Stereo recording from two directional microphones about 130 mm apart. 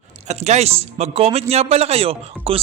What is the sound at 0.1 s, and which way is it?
Speech, 60° right (ahead or behind).